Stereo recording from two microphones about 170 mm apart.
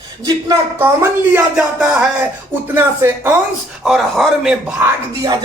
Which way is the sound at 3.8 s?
Centre (ahead or behind).